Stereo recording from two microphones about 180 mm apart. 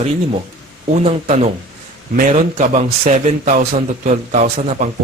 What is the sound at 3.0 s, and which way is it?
Speech, 40° right (ahead or behind).